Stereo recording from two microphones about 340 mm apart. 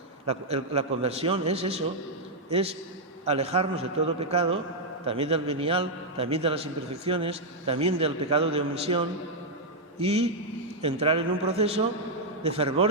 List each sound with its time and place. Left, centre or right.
0.3 s a man's voice: centre